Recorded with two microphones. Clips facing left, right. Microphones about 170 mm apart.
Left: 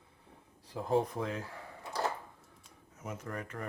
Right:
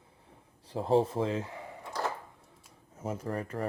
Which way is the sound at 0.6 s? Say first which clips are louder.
Right 4 dB; 30° right (ahead or behind).